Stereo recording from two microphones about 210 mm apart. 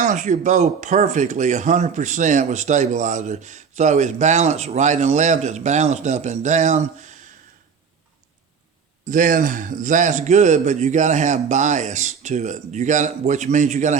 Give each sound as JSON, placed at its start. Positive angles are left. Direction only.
{"t": 0.0, "sound": "speech", "side_deg": -35}
{"t": 9.0, "sound": "speech", "side_deg": -40}